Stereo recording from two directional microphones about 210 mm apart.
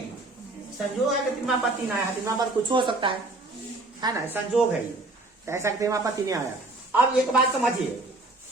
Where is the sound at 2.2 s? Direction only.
20° right (ahead or behind).